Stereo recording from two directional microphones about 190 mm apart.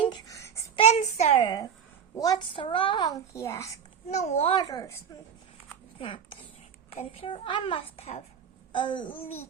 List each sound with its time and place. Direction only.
0.0 s babbling: 20° left (ahead or behind)
0.8 s a child's voice: 35° left (ahead or behind)
1.4 s a woman's voice: 20° left (ahead or behind)
3.3 s a child's voice: 15° left (ahead or behind)
4.1 s a child's voice: 35° left (ahead or behind)
4.6 s a woman's voice: 20° left (ahead or behind)
6.0 s a child's voice: 25° left (ahead or behind)